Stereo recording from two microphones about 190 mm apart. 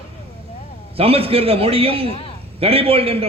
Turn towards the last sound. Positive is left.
turn(degrees=-30)  # may be behind; listen again after turning